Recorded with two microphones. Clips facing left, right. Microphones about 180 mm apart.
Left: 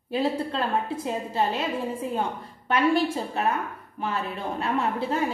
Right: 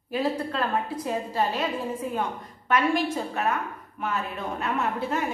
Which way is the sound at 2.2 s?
30° left (ahead or behind).